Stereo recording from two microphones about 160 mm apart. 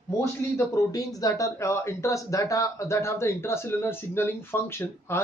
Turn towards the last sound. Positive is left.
turn(degrees=15)  # may be behind; listen again after turning